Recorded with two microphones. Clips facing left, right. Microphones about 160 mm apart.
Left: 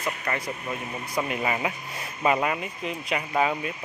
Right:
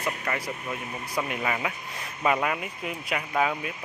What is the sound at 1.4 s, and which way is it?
Speech, 20° left (ahead or behind).